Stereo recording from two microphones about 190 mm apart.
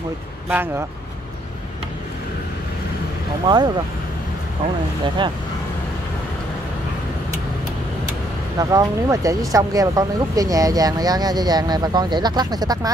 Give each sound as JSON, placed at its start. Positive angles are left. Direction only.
{"t": 0.5, "sound": "speech", "side_deg": -10}
{"t": 3.4, "sound": "speech", "side_deg": -20}
{"t": 5.0, "sound": "speech", "side_deg": -25}
{"t": 8.5, "sound": "speech", "side_deg": -20}